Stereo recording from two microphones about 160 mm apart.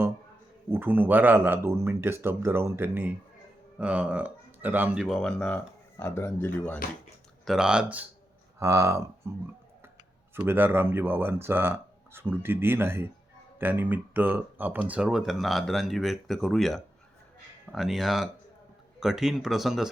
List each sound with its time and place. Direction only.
0.7 s speech: 15° right (ahead or behind); by 6.7 s 10° left (ahead or behind)
7.4 s speech: 5° right (ahead or behind)
8.5 s speech: 20° right (ahead or behind)
10.3 s speech: 15° right (ahead or behind)